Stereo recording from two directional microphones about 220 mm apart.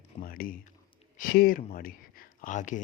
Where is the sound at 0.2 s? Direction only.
40° left (ahead or behind).